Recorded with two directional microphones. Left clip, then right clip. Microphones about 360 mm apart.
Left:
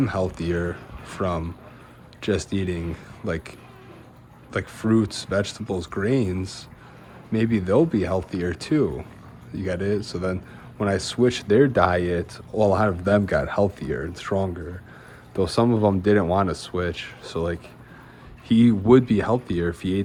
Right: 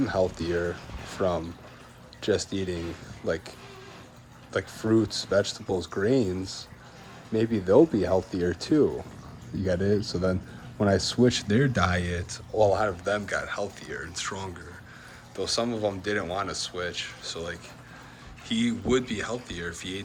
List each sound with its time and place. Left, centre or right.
0.0 s speech: centre
4.5 s speech: centre